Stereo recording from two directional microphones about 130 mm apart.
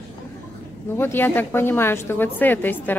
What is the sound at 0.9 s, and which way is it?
A woman's voice, 15° left (ahead or behind).